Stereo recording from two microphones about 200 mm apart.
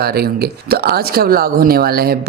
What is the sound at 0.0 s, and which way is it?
Speech, 50° right (ahead or behind).